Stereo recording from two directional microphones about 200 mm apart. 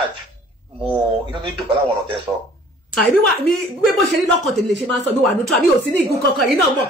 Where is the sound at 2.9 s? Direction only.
Centre (ahead or behind).